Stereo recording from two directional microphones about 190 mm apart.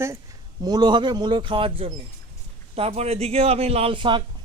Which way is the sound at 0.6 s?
20° right (ahead or behind).